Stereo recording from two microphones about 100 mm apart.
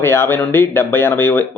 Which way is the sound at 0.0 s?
25° left (ahead or behind).